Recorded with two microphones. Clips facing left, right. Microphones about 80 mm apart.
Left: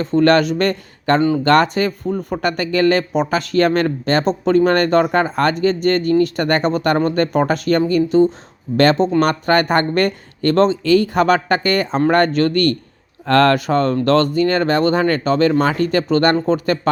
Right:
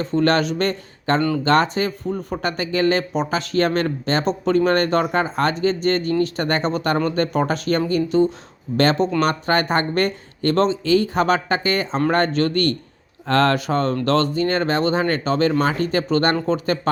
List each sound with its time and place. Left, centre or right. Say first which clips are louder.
0.0 s speech: left 5 dB; left
9.2 s speech: left 4 dB; left
12.4 s speech: left 4 dB; left
13.2 s speech: left 4 dB; left